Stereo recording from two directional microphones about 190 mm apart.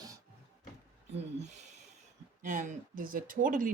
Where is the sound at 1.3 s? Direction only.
40° right (ahead or behind).